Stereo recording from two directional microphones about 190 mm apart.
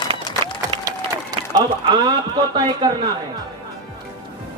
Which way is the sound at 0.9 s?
20° right (ahead or behind).